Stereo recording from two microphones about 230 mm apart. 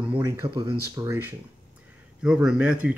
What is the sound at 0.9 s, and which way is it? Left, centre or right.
Speech, centre.